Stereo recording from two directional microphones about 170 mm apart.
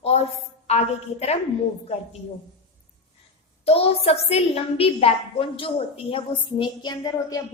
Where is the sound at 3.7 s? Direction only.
35° left (ahead or behind).